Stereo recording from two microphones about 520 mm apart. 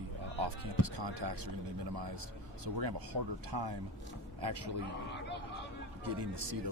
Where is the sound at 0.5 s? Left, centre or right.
Right.